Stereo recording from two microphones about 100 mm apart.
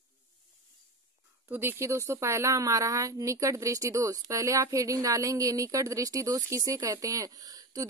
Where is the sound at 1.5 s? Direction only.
20° right (ahead or behind).